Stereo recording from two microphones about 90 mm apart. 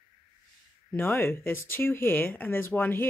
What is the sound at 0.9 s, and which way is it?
Speech, 20° left (ahead or behind).